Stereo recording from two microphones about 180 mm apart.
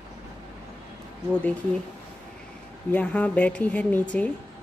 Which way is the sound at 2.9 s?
10° left (ahead or behind).